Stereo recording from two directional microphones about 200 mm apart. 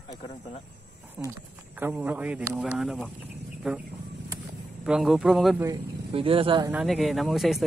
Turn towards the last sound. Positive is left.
turn(degrees=0)  # may be behind; listen again after turning